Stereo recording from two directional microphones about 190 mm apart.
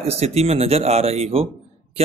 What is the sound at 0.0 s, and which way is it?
A man's voice, 35° right (ahead or behind).